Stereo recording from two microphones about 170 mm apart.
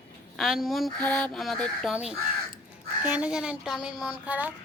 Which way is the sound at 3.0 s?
10° right (ahead or behind).